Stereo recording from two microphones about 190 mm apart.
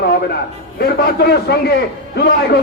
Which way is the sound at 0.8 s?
60° left (ahead or behind).